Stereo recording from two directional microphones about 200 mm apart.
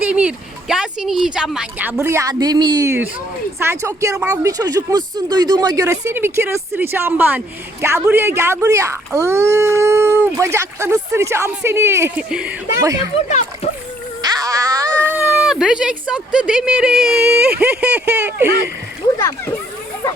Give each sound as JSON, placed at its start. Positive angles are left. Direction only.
{"t": 0.0, "sound": "speech", "side_deg": -5}
{"t": 13.2, "sound": "a child's voice", "side_deg": 35}
{"t": 14.2, "sound": "music", "side_deg": -20}
{"t": 15.0, "sound": "speech", "side_deg": -10}